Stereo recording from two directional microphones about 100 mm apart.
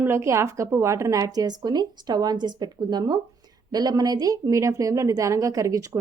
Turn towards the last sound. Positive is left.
turn(degrees=-35)  # may be behind; listen again after turning